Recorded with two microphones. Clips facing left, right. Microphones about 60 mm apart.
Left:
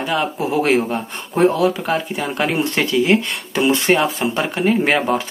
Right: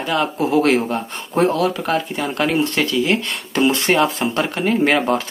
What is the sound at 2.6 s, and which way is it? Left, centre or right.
Speech, left.